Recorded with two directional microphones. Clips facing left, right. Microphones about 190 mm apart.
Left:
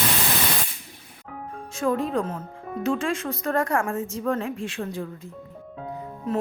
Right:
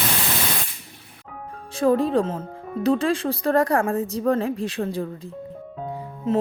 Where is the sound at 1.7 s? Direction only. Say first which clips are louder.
Right 5 dB; 35° right (ahead or behind).